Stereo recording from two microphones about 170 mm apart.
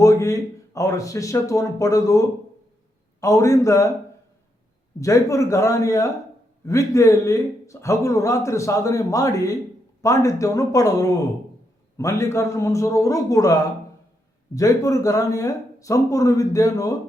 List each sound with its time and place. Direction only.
0.0 s a man's voice: 20° left (ahead or behind)
4.9 s a man's voice: 20° left (ahead or behind)